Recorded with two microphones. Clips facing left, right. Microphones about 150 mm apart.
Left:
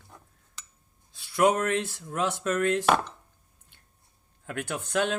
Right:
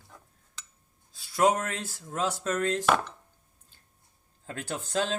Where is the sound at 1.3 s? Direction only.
35° right (ahead or behind).